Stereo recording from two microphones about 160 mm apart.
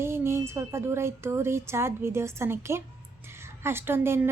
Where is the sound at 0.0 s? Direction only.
15° right (ahead or behind).